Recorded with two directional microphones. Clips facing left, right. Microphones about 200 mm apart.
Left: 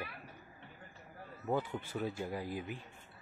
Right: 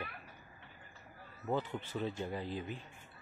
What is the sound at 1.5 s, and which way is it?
Speech, 10° left (ahead or behind).